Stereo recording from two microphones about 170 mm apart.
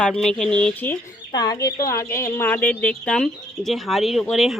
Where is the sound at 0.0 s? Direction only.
5° left (ahead or behind).